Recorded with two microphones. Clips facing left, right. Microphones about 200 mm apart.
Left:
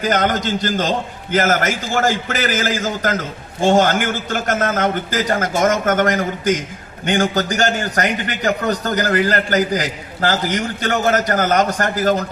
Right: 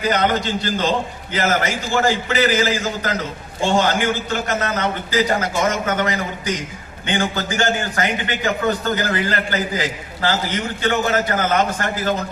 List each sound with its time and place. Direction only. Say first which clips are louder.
0.0 s a man's voice: left 1 dB; 45° left (ahead or behind)